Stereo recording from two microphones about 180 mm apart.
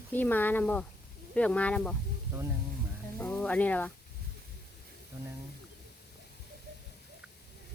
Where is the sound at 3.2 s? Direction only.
5° left (ahead or behind).